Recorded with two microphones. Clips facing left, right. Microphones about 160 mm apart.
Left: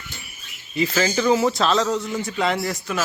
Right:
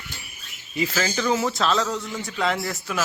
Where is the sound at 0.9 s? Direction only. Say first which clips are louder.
Left 5 dB; 10° left (ahead or behind).